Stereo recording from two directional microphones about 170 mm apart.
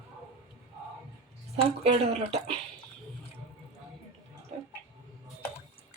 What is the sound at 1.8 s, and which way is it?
Speech, 40° right (ahead or behind).